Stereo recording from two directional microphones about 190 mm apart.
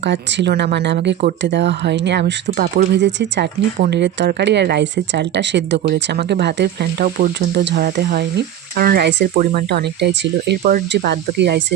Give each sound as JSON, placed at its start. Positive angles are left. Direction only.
{"t": 0.0, "sound": "speech", "side_deg": -65}
{"t": 9.4, "sound": "speech", "side_deg": -50}